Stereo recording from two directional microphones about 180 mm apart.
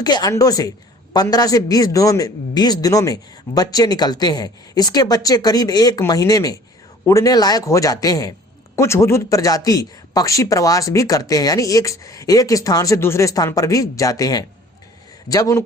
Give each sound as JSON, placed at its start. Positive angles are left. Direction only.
{"t": 0.0, "sound": "a man's voice", "side_deg": 20}